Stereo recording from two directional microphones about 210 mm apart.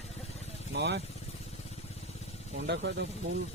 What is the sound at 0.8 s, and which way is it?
Speech, 50° right (ahead or behind).